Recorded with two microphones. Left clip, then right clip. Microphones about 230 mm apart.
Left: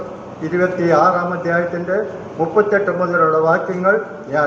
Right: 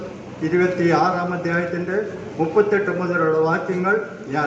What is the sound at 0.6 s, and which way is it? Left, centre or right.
A man's voice, right.